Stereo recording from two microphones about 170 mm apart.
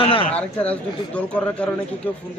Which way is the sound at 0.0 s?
30° left (ahead or behind).